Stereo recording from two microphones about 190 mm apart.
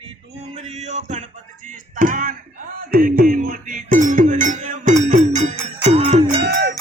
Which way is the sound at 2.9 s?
50° right (ahead or behind).